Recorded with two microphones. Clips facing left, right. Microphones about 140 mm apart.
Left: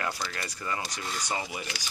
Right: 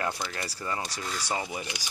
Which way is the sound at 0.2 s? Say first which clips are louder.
Right 1 dB; 25° right (ahead or behind).